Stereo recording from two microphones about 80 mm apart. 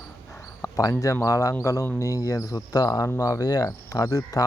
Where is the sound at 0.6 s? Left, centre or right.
Left.